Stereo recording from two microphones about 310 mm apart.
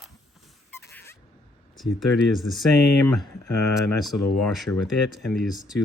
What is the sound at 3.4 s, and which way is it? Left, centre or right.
Speech, left.